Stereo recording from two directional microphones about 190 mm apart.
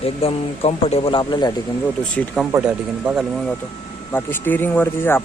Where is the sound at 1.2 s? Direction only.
20° left (ahead or behind).